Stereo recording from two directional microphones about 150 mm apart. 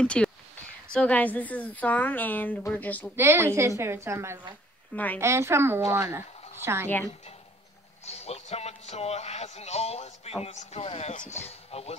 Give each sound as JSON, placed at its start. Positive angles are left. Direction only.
{"t": 0.0, "sound": "a woman's voice", "side_deg": 5}
{"t": 3.2, "sound": "a woman's voice", "side_deg": -15}
{"t": 4.9, "sound": "a woman's voice", "side_deg": 10}
{"t": 5.2, "sound": "a woman's voice", "side_deg": -15}
{"t": 8.0, "sound": "a sound", "side_deg": 45}
{"t": 10.4, "sound": "speech", "side_deg": 50}